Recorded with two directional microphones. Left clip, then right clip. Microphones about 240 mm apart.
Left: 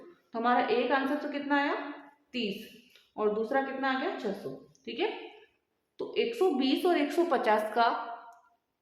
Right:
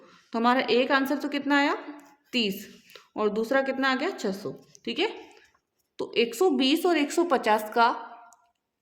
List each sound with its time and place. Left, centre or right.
0.3 s a woman's voice: right
4.7 s a sound: right
6.0 s a woman's voice: right